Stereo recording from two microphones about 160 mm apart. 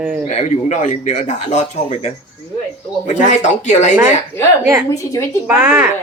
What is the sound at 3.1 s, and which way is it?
Speech, 50° left (ahead or behind).